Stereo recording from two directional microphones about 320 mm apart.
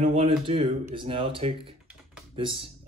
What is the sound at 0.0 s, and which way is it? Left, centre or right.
Speech, centre.